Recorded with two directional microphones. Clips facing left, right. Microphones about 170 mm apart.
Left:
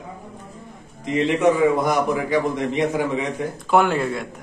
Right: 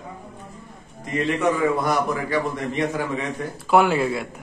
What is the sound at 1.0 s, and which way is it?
A man's voice, 20° left (ahead or behind).